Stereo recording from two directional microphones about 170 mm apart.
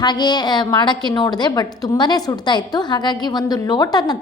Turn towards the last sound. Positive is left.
turn(degrees=25)  # may be behind; listen again after turning